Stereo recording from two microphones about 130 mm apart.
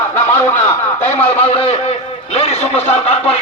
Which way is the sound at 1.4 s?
50° left (ahead or behind).